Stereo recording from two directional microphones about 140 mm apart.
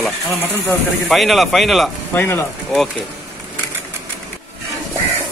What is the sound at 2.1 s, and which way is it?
Speech, 15° left (ahead or behind).